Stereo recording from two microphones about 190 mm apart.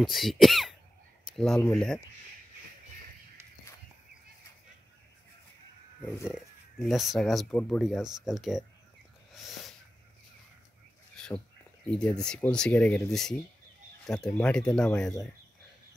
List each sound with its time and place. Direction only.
0.0 s speech: centre (ahead or behind)
1.2 s a sound: centre (ahead or behind)
1.6 s speech: 5° left (ahead or behind)
6.2 s speech: centre (ahead or behind)
11.1 s bird: 5° left (ahead or behind)
12.0 s speech: 5° left (ahead or behind)